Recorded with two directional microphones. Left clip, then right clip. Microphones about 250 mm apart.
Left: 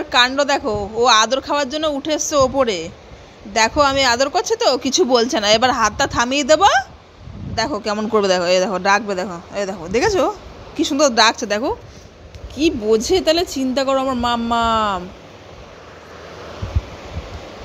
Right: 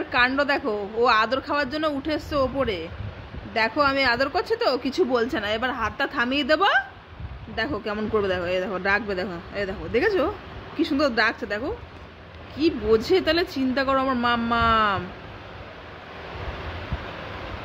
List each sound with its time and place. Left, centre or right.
0.3 s speech: centre
11.4 s speech: left
12.5 s speech: centre